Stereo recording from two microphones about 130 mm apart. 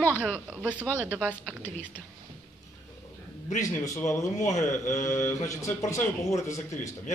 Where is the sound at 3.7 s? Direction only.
20° left (ahead or behind).